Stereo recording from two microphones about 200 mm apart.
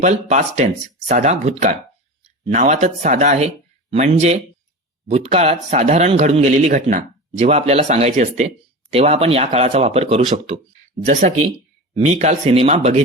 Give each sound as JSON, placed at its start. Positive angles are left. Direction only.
{"t": 0.0, "sound": "speech", "side_deg": -35}